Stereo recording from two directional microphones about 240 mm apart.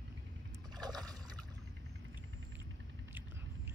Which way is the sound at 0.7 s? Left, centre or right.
Centre.